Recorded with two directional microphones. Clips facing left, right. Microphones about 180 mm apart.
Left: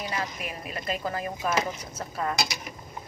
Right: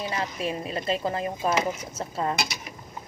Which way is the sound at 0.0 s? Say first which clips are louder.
Right 4 dB; 25° right (ahead or behind).